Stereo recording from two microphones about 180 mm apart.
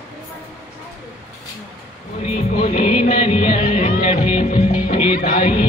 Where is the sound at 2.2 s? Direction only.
30° left (ahead or behind).